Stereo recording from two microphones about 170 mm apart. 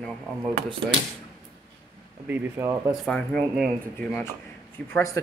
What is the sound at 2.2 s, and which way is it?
Speech, 15° right (ahead or behind).